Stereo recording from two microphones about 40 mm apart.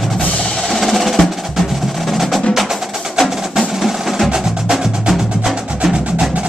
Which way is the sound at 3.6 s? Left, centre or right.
Centre.